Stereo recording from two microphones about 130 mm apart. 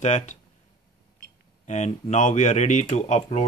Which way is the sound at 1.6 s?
65° left (ahead or behind).